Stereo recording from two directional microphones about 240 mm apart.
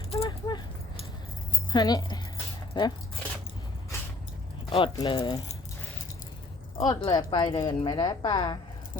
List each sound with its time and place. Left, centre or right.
0.1 s keys jangling: left
1.7 s speech: centre
4.7 s speech: centre
6.7 s a woman's voice: centre